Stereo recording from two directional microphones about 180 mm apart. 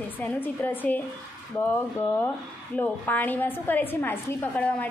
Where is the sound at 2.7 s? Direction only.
10° left (ahead or behind).